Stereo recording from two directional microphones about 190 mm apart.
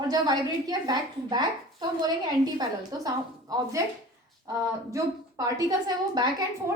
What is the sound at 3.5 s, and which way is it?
Speech, 15° right (ahead or behind).